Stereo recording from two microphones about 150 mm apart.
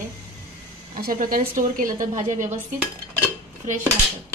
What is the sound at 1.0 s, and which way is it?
A woman's voice, 65° right (ahead or behind).